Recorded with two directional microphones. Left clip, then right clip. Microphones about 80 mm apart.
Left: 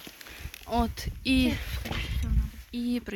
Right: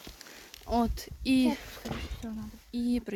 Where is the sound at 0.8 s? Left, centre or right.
Right.